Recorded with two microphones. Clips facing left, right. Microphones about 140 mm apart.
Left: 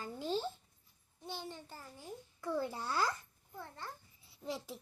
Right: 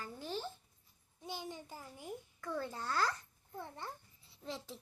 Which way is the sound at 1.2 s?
10° right (ahead or behind).